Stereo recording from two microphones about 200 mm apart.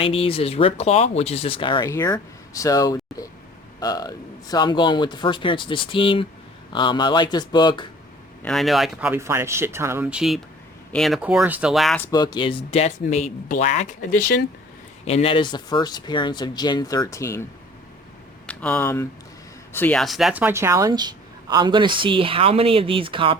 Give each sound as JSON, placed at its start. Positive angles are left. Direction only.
{"t": 0.0, "sound": "speech", "side_deg": 30}
{"t": 8.4, "sound": "speech", "side_deg": 0}
{"t": 12.0, "sound": "speech", "side_deg": 20}
{"t": 15.0, "sound": "speech", "side_deg": 30}
{"t": 18.4, "sound": "speech", "side_deg": 5}